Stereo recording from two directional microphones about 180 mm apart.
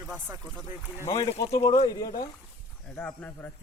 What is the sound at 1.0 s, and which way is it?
Speech, 20° left (ahead or behind).